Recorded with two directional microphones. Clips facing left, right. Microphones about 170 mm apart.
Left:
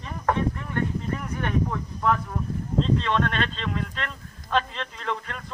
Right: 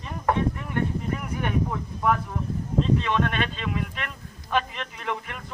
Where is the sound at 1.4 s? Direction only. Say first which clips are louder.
Left 1 dB; 10° right (ahead or behind).